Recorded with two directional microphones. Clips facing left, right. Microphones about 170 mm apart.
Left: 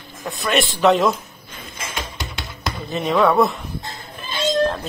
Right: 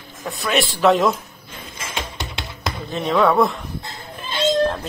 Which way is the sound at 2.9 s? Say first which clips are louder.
Even; 5° left (ahead or behind).